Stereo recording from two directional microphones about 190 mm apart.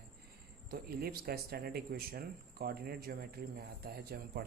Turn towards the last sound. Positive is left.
turn(degrees=-55)  # may be behind; listen again after turning